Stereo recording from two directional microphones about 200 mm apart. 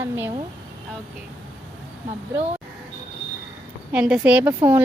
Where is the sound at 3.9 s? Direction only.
5° right (ahead or behind).